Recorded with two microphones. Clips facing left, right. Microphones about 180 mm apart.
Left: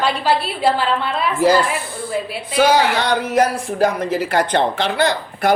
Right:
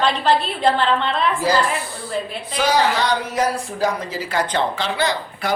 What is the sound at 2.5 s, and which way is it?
A man's voice, 55° left (ahead or behind).